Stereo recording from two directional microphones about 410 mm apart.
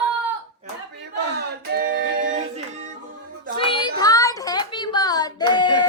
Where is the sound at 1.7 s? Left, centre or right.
Right.